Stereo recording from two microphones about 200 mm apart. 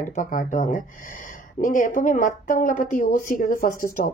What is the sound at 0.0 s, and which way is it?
Speech, 40° left (ahead or behind).